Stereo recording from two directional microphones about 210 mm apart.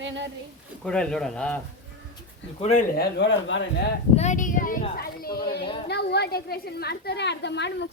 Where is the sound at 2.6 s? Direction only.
30° left (ahead or behind).